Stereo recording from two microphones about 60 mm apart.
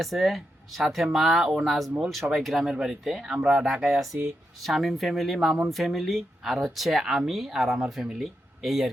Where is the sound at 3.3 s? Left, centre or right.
Centre.